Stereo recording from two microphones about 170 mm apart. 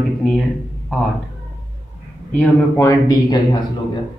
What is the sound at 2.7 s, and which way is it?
Speech, 20° left (ahead or behind).